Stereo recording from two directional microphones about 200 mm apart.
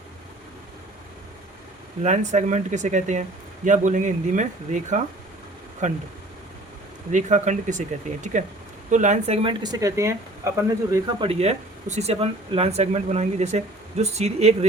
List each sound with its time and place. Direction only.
2.0 s speech: 35° right (ahead or behind)
7.1 s speech: 40° right (ahead or behind); by 10.5 s 15° right (ahead or behind)
10.9 s speech: 25° right (ahead or behind)